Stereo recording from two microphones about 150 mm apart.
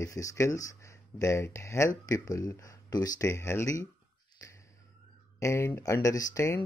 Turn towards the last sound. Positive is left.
turn(degrees=20)  # may be behind; listen again after turning